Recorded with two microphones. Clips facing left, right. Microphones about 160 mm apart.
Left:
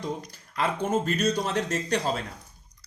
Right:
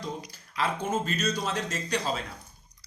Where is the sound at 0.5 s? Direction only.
50° left (ahead or behind).